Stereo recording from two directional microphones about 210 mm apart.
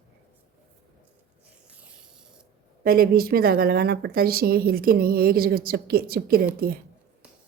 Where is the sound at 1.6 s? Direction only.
5° right (ahead or behind).